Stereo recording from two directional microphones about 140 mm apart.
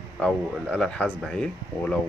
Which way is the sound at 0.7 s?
5° left (ahead or behind).